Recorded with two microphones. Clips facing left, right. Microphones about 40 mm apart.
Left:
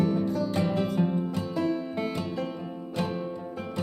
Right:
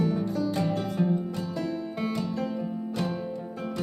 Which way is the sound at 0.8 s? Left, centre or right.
Centre.